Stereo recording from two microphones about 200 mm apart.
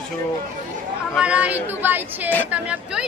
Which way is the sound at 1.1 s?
5° right (ahead or behind).